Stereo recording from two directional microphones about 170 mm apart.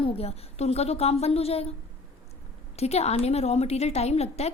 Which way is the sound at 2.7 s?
40° left (ahead or behind).